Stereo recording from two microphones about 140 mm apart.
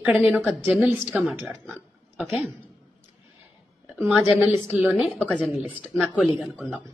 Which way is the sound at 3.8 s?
10° right (ahead or behind).